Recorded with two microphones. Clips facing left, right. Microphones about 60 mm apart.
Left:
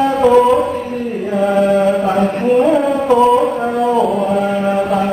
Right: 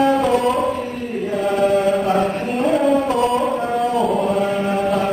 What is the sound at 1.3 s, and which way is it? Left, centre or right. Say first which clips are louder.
Chant: left 4 dB; centre.